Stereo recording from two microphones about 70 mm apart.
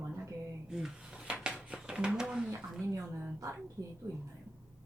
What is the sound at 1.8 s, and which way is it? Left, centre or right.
Speech, centre.